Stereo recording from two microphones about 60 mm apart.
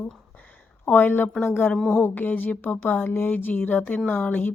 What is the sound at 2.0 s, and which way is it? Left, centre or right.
A woman's voice, left.